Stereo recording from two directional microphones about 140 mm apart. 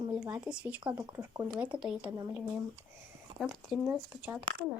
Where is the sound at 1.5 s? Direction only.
10° right (ahead or behind).